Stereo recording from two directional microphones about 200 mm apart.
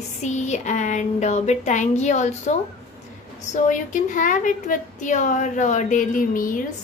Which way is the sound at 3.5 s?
40° left (ahead or behind).